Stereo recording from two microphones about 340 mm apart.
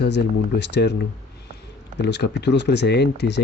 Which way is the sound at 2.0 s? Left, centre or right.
Left.